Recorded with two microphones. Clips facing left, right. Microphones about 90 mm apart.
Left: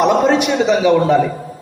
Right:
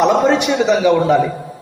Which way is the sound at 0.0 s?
5° left (ahead or behind).